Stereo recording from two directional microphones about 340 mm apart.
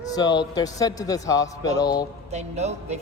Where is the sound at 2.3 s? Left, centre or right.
Centre.